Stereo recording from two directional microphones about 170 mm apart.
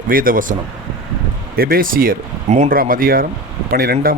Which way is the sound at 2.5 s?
40° right (ahead or behind).